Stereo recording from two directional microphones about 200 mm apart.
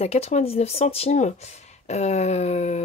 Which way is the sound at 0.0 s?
30° left (ahead or behind).